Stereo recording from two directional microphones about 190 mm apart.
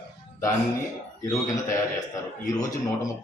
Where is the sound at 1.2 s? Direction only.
15° left (ahead or behind).